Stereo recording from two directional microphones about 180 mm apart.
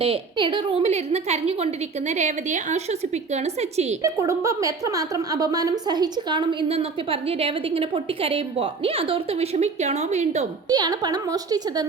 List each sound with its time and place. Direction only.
0.0 s a woman's voice: 30° right (ahead or behind)
4.0 s a woman's voice: 15° right (ahead or behind); by 10.4 s 40° right (ahead or behind)
10.7 s a woman's voice: 20° right (ahead or behind)